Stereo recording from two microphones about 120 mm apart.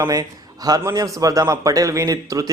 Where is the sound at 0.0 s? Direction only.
30° right (ahead or behind).